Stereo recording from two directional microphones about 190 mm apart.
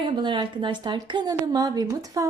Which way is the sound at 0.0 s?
25° right (ahead or behind).